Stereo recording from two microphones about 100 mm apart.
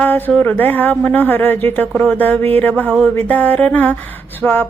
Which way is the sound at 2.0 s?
15° left (ahead or behind).